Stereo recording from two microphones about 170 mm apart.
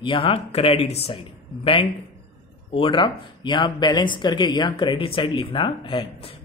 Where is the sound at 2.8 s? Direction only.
30° left (ahead or behind).